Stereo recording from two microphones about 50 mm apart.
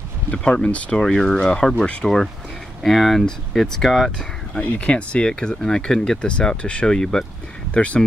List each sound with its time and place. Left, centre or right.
0.3 s speech: left
1.0 s speech: centre
4.7 s speech: left
7.7 s speech: left